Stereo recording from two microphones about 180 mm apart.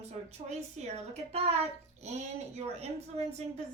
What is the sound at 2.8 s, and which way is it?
Speech, 35° right (ahead or behind).